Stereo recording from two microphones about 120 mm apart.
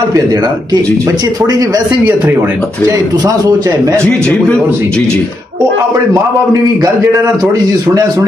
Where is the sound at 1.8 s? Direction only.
15° right (ahead or behind).